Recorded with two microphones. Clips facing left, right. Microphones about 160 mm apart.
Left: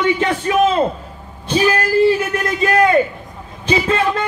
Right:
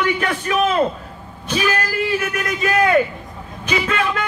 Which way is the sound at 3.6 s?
30° left (ahead or behind).